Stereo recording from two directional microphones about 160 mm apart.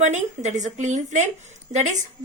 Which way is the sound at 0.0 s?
50° right (ahead or behind).